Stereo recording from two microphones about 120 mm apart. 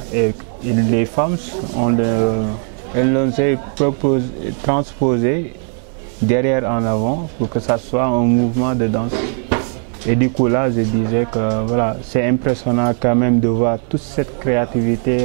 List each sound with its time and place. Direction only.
0.1 s speech: 10° right (ahead or behind)